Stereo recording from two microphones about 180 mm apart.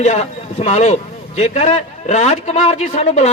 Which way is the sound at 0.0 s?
40° left (ahead or behind).